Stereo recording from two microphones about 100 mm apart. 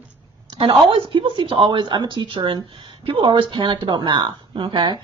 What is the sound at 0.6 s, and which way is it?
A woman's voice, 55° right (ahead or behind).